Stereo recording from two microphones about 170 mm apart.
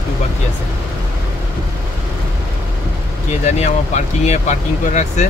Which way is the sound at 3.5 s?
40° left (ahead or behind).